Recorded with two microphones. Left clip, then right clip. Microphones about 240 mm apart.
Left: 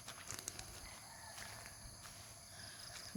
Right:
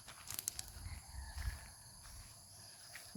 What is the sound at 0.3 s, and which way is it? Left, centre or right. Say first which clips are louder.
Clip-clop: right 4 dB; centre.